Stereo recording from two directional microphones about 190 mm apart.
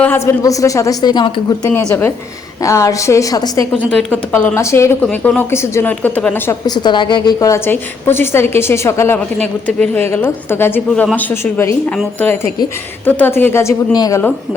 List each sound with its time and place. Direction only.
0.0 s a woman's voice: 10° left (ahead or behind)
3.7 s a woman's voice: 5° left (ahead or behind)